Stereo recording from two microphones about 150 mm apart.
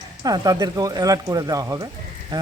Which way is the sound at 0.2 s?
25° right (ahead or behind).